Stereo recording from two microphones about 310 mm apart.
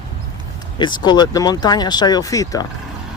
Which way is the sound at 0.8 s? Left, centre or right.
Centre.